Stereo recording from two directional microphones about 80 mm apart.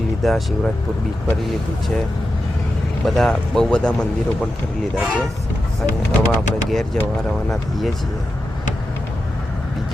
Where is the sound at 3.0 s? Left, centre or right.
Centre.